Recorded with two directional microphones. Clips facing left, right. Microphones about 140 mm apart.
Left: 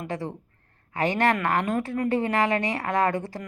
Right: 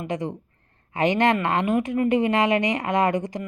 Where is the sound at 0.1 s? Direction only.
20° right (ahead or behind).